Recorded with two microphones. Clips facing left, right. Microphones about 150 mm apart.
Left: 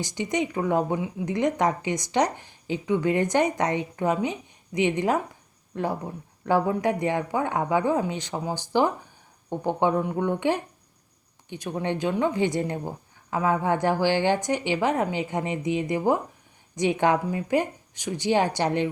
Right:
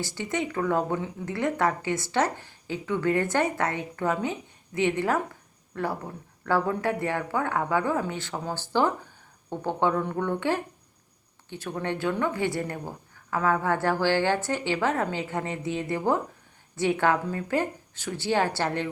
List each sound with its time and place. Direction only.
0.0 s speech: 15° left (ahead or behind)